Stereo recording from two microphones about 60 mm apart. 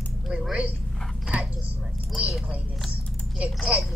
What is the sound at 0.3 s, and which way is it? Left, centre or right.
Speech, centre.